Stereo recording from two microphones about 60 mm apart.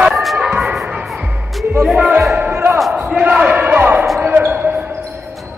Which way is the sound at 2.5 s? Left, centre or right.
Right.